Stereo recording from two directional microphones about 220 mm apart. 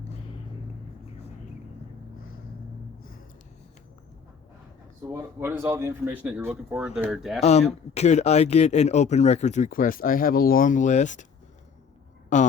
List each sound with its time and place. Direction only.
5.0 s speech: 10° right (ahead or behind)
7.4 s speech: 30° left (ahead or behind)
12.3 s speech: 35° left (ahead or behind)